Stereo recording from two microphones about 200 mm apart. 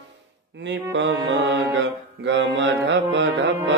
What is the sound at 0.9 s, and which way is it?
Music, 65° right (ahead or behind).